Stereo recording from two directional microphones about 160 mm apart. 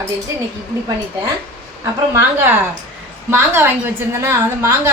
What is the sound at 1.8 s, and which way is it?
A woman's voice, 15° right (ahead or behind).